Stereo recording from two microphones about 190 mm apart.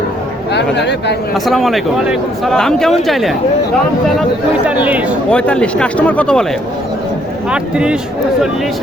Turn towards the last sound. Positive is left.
turn(degrees=-5)  # may be behind; listen again after turning